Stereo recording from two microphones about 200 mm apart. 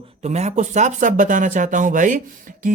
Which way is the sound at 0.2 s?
35° right (ahead or behind).